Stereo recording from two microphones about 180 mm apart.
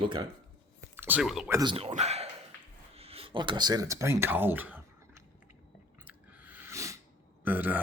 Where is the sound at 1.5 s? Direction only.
20° right (ahead or behind).